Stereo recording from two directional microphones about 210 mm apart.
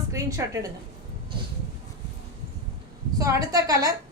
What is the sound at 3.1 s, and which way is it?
Speech, 15° right (ahead or behind).